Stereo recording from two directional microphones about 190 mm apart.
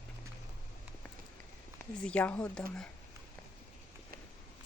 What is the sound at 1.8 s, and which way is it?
Speech, 5° left (ahead or behind).